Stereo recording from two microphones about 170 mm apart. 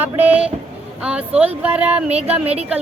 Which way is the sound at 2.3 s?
35° right (ahead or behind).